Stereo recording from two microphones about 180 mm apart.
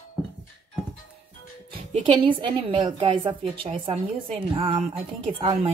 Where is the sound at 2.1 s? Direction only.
30° right (ahead or behind).